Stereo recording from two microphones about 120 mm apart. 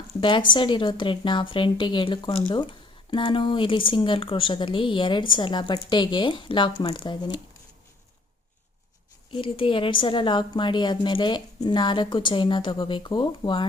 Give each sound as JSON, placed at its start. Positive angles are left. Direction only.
{"t": 0.2, "sound": "a woman's voice", "side_deg": 40}
{"t": 9.3, "sound": "a woman's voice", "side_deg": 45}